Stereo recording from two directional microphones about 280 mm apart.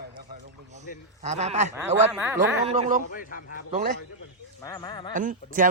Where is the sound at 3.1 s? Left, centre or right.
Left.